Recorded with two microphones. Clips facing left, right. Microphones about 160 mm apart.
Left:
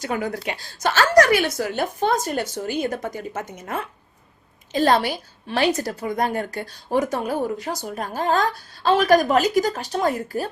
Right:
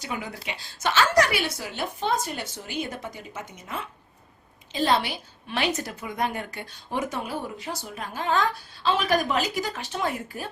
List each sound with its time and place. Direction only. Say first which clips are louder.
0.0 s a woman's voice: left 8 dB; 45° left (ahead or behind)